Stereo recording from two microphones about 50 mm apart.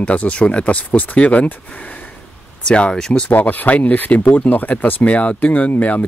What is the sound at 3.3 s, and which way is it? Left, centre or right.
Speech, left.